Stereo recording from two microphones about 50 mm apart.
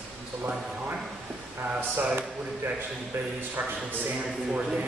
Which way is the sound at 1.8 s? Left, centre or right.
Right.